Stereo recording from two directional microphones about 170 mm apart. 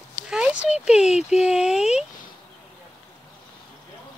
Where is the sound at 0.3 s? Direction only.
5° right (ahead or behind).